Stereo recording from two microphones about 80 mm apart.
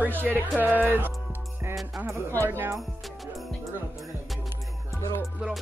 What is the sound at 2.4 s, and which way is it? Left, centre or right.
Speech, right.